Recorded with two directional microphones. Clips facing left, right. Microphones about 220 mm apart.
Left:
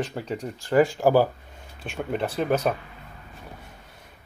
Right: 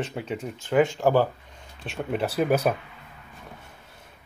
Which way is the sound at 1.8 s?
5° right (ahead or behind).